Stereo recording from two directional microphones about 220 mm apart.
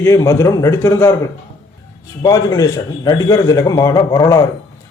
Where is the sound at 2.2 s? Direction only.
15° left (ahead or behind).